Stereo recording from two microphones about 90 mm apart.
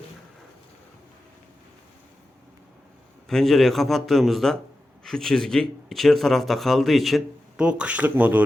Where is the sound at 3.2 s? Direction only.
5° left (ahead or behind).